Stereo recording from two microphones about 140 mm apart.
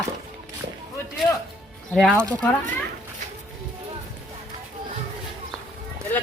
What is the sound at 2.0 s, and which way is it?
Speech, 5° right (ahead or behind).